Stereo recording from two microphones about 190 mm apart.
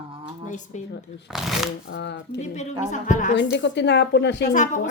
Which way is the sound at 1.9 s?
65° left (ahead or behind).